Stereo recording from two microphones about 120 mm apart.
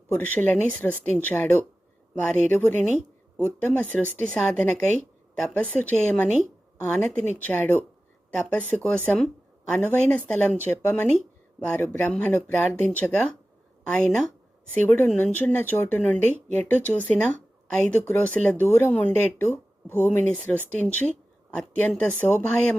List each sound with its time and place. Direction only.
0.1 s a woman's voice: 15° left (ahead or behind)